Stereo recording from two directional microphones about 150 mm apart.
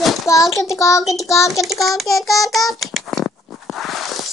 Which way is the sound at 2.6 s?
Centre (ahead or behind).